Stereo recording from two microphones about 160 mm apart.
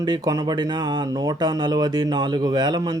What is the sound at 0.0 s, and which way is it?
Speech, 25° right (ahead or behind).